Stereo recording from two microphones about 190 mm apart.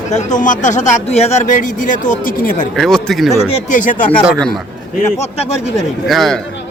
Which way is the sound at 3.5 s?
40° left (ahead or behind).